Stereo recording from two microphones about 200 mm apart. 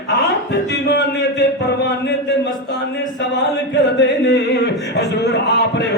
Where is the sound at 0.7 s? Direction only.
55° left (ahead or behind).